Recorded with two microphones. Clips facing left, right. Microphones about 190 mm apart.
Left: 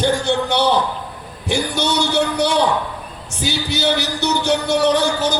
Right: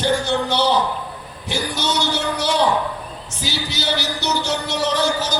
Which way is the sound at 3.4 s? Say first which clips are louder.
Left 6 dB; 60° left (ahead or behind).